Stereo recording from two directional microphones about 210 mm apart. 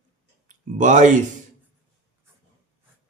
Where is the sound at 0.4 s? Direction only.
35° right (ahead or behind).